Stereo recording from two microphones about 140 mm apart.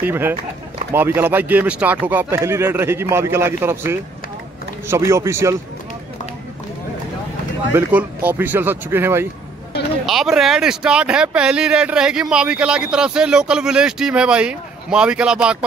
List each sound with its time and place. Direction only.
0.0 s speech: 15° right (ahead or behind)
7.7 s speech: 10° right (ahead or behind)
10.0 s speech: centre (ahead or behind)